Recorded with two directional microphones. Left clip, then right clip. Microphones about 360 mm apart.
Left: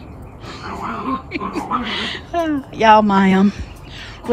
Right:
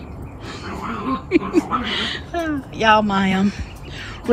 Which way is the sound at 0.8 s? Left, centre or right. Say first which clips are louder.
Left 2 dB; left.